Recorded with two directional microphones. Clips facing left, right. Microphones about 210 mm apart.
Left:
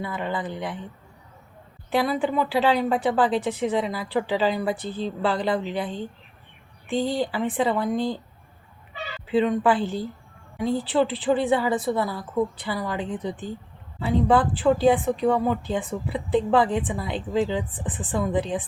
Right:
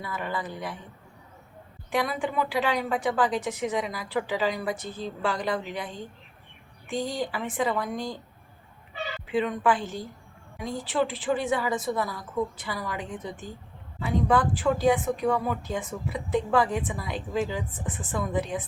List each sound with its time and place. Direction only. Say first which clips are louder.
0.0 s speech: left 4 dB; 25° left (ahead or behind)
1.9 s speech: left 5 dB; 30° left (ahead or behind)
9.2 s speech: left 5 dB; 35° left (ahead or behind)